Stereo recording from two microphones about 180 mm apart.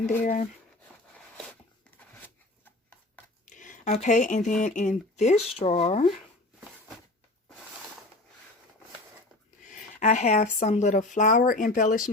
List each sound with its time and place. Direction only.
0.2 s speech: 45° left (ahead or behind)
3.4 s a sound: 45° left (ahead or behind)
4.6 s speech: 45° left (ahead or behind)
5.3 s speech: centre (ahead or behind)
5.5 s speech: 35° left (ahead or behind)
9.6 s speech: 45° left (ahead or behind)